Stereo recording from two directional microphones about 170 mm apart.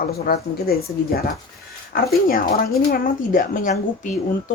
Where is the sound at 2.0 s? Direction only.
60° left (ahead or behind).